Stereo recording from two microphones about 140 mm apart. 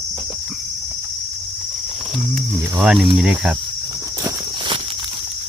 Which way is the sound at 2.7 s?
5° right (ahead or behind).